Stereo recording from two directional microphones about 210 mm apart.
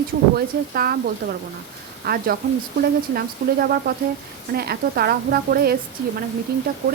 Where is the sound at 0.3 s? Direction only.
45° right (ahead or behind).